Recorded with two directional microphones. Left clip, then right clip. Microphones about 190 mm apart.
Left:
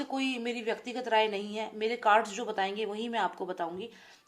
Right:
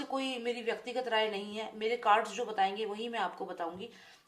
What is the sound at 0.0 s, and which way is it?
A woman's voice, 35° left (ahead or behind).